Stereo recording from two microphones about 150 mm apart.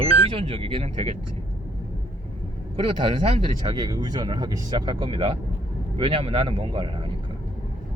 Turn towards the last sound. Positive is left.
turn(degrees=-35)  # may be behind; listen again after turning